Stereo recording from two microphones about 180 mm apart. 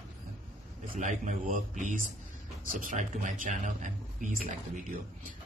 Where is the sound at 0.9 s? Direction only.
45° right (ahead or behind).